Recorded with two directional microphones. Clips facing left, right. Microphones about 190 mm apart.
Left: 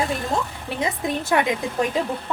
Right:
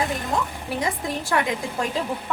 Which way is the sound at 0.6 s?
20° left (ahead or behind).